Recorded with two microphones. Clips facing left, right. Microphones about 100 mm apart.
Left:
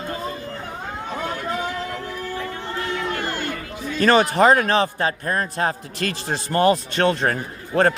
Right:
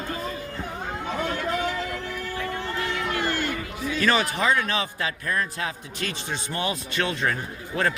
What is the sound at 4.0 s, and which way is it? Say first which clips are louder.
Speech: left 8 dB; 40° left (ahead or behind).